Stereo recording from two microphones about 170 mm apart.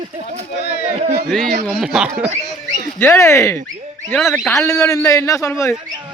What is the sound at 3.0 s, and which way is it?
A man's voice, 15° left (ahead or behind).